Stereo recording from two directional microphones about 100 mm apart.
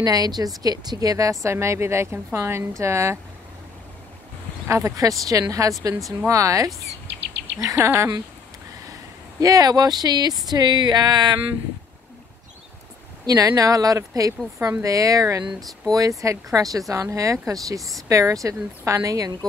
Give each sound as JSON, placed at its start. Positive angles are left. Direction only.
{"t": 0.0, "sound": "a woman's voice", "side_deg": -40}
{"t": 4.6, "sound": "a woman's voice", "side_deg": -30}
{"t": 9.4, "sound": "a woman's voice", "side_deg": -35}
{"t": 13.3, "sound": "a woman's voice", "side_deg": -35}
{"t": 17.7, "sound": "speech", "side_deg": 0}
{"t": 18.0, "sound": "a woman's voice", "side_deg": -30}